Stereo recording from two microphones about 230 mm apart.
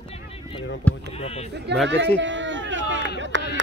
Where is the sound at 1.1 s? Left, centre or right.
Left.